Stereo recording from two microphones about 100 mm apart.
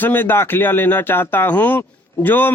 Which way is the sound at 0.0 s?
20° left (ahead or behind).